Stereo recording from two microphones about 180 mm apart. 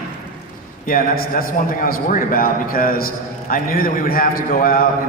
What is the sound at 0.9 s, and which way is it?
A man's voice, 55° left (ahead or behind).